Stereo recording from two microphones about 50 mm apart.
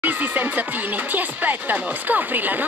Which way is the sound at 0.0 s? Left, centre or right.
Right.